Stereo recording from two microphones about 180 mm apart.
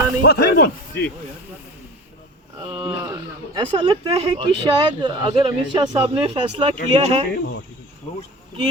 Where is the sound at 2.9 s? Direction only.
15° right (ahead or behind).